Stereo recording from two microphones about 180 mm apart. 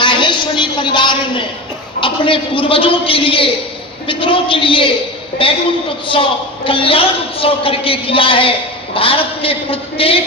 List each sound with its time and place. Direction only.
0.0 s a sound: 25° left (ahead or behind)
2.0 s a man's voice: 30° left (ahead or behind)
6.7 s a woman's voice: 30° left (ahead or behind)